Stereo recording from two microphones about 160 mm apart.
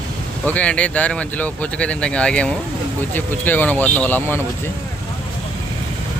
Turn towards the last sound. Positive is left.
turn(degrees=10)  # may be behind; listen again after turning